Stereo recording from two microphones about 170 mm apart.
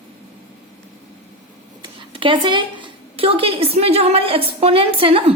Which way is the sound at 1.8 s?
30° right (ahead or behind).